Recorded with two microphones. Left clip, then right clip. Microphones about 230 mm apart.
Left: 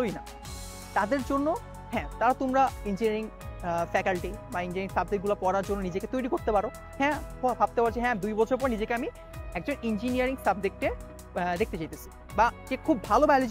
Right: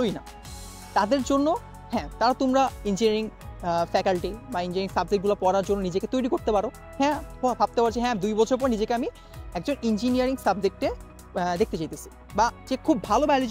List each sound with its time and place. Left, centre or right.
0.9 s speech: right